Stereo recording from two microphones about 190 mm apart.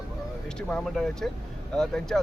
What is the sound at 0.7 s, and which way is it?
Speech, centre (ahead or behind).